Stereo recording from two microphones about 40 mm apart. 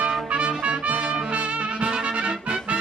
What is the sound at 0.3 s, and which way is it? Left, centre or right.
Trumpet, right.